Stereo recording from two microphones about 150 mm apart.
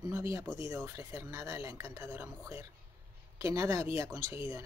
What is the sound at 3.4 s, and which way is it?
Speech, 20° right (ahead or behind).